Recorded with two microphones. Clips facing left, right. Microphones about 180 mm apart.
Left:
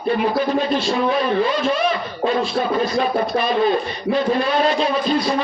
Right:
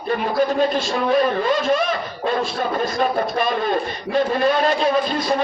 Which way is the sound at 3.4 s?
50° right (ahead or behind).